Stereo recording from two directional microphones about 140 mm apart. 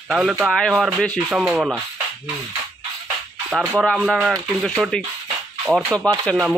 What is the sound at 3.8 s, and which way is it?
Speech, centre (ahead or behind).